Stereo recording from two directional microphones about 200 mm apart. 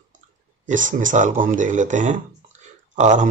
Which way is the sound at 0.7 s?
40° right (ahead or behind).